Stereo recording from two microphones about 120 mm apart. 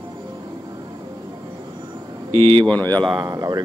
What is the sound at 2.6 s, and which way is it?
Speech, 15° left (ahead or behind).